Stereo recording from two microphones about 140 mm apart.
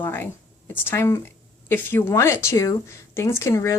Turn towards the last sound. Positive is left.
turn(degrees=20)  # may be behind; listen again after turning